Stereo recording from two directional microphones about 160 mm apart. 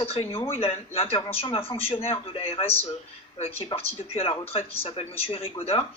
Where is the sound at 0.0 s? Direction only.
40° left (ahead or behind).